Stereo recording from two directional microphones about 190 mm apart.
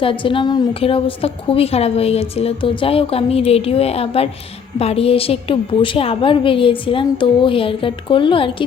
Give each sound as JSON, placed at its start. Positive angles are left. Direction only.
{"t": 0.0, "sound": "a woman's voice", "side_deg": 25}